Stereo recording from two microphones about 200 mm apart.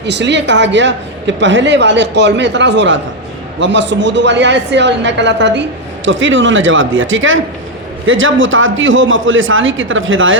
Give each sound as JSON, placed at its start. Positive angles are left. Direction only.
{"t": 0.0, "sound": "a woman's voice", "side_deg": -60}